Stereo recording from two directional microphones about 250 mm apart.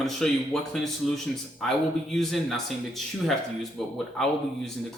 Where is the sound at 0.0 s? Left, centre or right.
Centre.